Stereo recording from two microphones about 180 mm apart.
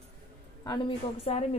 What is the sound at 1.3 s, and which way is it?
Speech, 35° left (ahead or behind).